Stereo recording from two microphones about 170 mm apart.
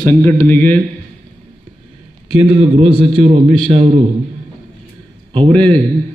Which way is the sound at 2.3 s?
35° right (ahead or behind).